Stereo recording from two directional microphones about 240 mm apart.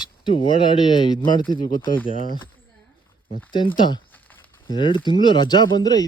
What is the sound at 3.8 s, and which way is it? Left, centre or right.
Speech, centre.